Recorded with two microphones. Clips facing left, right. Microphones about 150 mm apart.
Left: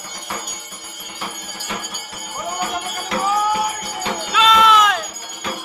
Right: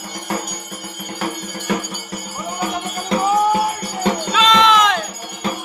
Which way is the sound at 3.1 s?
25° right (ahead or behind).